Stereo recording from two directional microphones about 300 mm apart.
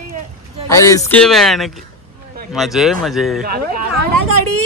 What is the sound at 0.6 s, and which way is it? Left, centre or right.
A man's voice, centre.